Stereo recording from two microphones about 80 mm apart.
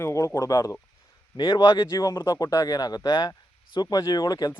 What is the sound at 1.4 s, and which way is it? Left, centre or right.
Speech, left.